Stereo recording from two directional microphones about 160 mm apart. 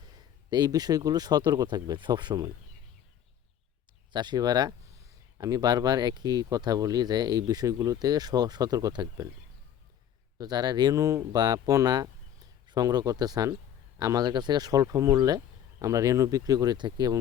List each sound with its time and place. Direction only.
0.5 s speech: 25° right (ahead or behind)
4.1 s speech: 25° right (ahead or behind)
10.3 s speech: 25° right (ahead or behind)